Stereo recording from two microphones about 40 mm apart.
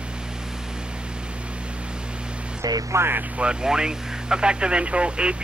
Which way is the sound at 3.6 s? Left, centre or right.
Centre.